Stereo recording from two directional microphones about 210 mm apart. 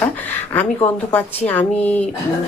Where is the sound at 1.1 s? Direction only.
10° left (ahead or behind).